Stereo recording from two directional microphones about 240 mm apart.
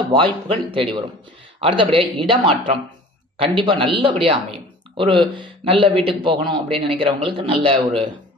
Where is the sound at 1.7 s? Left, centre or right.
Right.